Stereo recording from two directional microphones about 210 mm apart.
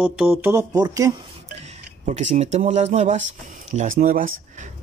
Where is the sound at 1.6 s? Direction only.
35° right (ahead or behind).